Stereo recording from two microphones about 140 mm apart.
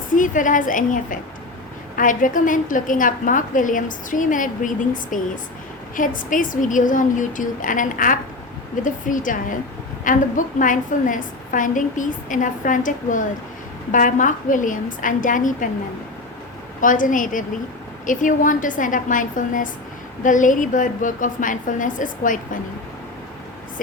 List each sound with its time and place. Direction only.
0.1 s a woman's voice: 70° left (ahead or behind)
16.8 s a woman's voice: 70° left (ahead or behind)